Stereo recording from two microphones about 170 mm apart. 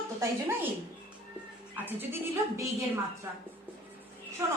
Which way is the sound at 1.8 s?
10° right (ahead or behind).